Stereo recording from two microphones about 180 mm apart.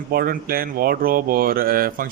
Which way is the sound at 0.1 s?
55° right (ahead or behind).